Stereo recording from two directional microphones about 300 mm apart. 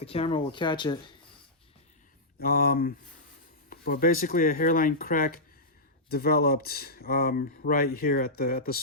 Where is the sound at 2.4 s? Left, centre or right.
Left.